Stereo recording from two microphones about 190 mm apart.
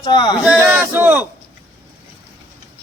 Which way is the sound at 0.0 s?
25° left (ahead or behind).